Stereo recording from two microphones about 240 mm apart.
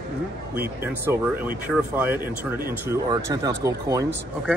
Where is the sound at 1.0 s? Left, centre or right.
Centre.